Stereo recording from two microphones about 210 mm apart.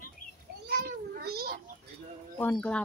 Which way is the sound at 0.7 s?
50° right (ahead or behind).